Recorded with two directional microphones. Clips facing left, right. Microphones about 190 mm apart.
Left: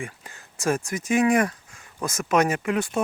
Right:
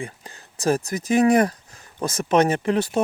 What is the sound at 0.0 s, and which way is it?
Speech, 35° right (ahead or behind).